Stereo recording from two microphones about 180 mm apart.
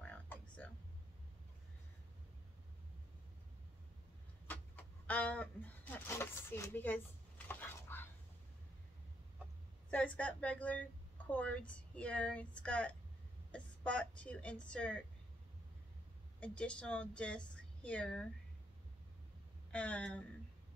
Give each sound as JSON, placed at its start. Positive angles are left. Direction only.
{"t": 5.0, "sound": "a sound", "side_deg": 10}
{"t": 9.8, "sound": "a woman's voice", "side_deg": 5}
{"t": 16.3, "sound": "speech", "side_deg": 5}
{"t": 19.7, "sound": "speech", "side_deg": 5}